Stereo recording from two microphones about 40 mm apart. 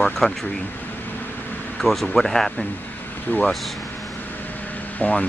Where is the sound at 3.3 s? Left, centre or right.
Left.